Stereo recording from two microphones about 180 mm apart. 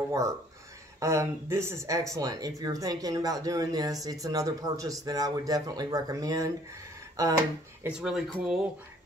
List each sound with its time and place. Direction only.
0.1 s speech: 15° right (ahead or behind)
7.8 s speech: 5° right (ahead or behind)